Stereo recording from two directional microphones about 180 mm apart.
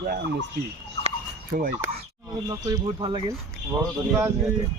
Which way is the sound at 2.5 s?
20° right (ahead or behind).